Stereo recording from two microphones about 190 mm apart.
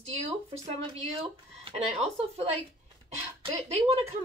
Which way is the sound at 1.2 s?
30° right (ahead or behind).